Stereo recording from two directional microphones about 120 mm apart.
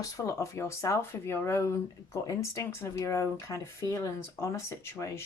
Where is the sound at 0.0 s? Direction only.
25° left (ahead or behind).